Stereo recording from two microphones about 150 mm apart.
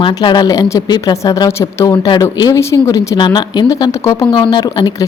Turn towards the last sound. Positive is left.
turn(degrees=30)  # may be behind; listen again after turning